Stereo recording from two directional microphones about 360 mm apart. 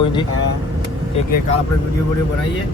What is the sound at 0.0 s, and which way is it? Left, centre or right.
Speech, centre.